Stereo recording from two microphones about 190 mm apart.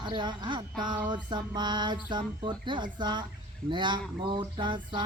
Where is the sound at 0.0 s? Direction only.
25° right (ahead or behind).